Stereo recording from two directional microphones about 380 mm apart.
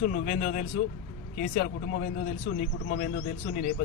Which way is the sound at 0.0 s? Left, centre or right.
Centre.